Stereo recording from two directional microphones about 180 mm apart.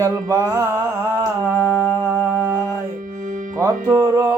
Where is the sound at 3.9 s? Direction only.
15° right (ahead or behind).